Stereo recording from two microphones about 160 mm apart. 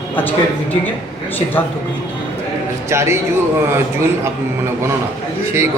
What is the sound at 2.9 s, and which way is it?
Speech, 15° right (ahead or behind).